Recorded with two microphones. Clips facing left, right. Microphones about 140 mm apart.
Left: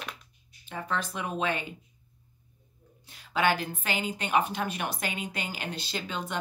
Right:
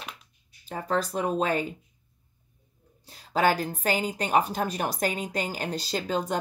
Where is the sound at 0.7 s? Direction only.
40° right (ahead or behind).